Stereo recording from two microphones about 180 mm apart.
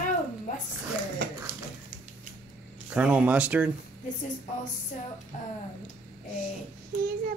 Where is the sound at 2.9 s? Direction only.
5° right (ahead or behind).